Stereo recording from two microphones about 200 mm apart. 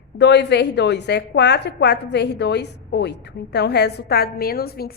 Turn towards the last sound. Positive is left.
turn(degrees=50)  # may be behind; listen again after turning